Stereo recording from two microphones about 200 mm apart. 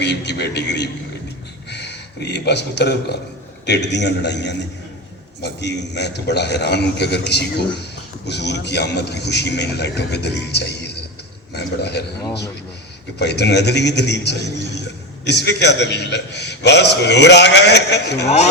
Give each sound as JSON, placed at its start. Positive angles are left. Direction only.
{"t": 0.0, "sound": "a man's voice", "side_deg": 60}
{"t": 13.1, "sound": "a man's voice", "side_deg": 55}